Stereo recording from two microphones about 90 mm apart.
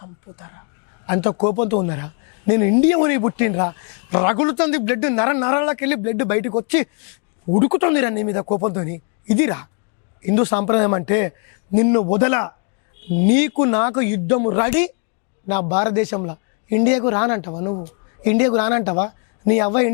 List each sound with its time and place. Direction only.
0.0 s a sound: 25° left (ahead or behind)
1.0 s a man's voice: 15° left (ahead or behind)
17.5 s speech: 30° left (ahead or behind)